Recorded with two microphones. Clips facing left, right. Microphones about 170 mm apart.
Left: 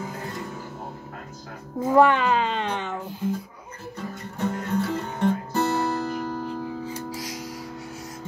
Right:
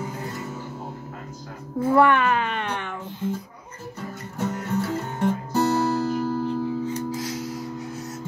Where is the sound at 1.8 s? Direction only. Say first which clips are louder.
Even; 20° left (ahead or behind).